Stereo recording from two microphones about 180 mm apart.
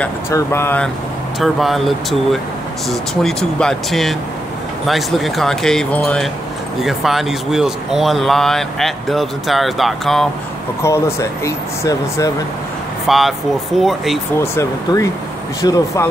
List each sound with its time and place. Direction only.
0.3 s speech: 15° left (ahead or behind)
1.4 s speech: centre (ahead or behind)
3.2 s speech: 5° left (ahead or behind)
10.8 s speech: 15° left (ahead or behind)
13.0 s speech: centre (ahead or behind)
14.4 s speech: 15° left (ahead or behind)